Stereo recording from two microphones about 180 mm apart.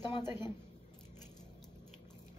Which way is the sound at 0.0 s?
25° left (ahead or behind).